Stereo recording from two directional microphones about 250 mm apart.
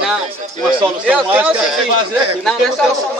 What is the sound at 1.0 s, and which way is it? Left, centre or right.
Speech, centre.